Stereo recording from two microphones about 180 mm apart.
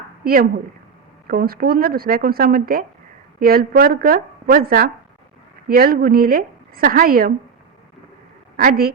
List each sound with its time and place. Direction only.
1.3 s a woman's voice: 55° right (ahead or behind)
8.5 s a woman's voice: 55° right (ahead or behind)